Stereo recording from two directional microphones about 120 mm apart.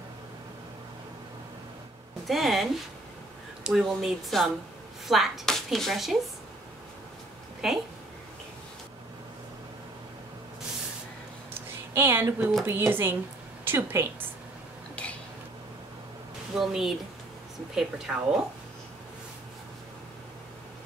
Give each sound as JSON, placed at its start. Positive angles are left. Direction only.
{"t": 2.2, "sound": "speech", "side_deg": 0}
{"t": 7.6, "sound": "speech", "side_deg": -5}
{"t": 11.9, "sound": "a woman's voice", "side_deg": -20}
{"t": 16.5, "sound": "speech", "side_deg": -5}